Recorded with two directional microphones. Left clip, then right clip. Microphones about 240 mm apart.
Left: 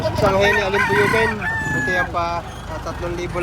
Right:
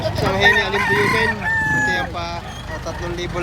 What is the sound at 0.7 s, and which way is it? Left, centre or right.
Speech, right.